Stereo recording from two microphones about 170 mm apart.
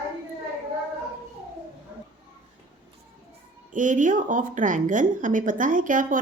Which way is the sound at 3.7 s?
50° right (ahead or behind).